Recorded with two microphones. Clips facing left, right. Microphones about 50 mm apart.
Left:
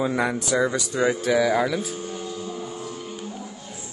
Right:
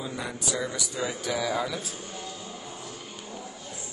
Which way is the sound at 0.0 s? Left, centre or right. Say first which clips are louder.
Left 10 dB; left.